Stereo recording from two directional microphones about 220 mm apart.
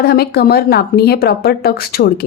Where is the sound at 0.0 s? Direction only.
45° left (ahead or behind).